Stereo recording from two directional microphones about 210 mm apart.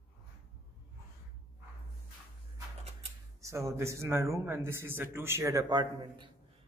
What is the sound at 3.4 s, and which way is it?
A man's voice, 15° right (ahead or behind).